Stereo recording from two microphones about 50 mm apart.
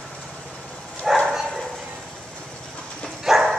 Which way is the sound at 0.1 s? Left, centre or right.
Centre.